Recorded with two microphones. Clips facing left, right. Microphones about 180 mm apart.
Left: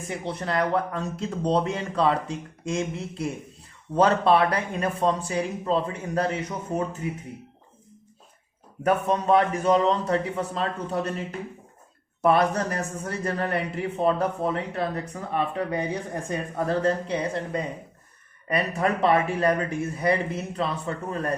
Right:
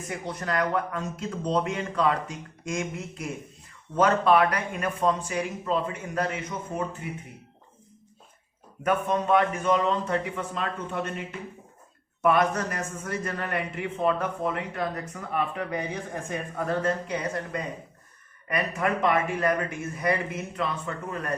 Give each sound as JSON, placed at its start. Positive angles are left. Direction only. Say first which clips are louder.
{"t": 0.1, "sound": "a man's voice", "louder": "left 2 dB", "side_deg": 30}
{"t": 8.8, "sound": "a man's voice", "louder": "left 2 dB", "side_deg": 35}